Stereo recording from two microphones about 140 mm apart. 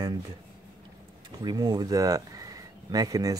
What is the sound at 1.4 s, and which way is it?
Speech, 30° right (ahead or behind).